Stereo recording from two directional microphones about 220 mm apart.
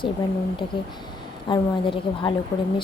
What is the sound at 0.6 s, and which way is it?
Speech, 25° left (ahead or behind).